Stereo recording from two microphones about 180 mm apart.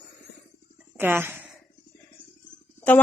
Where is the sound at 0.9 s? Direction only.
10° right (ahead or behind).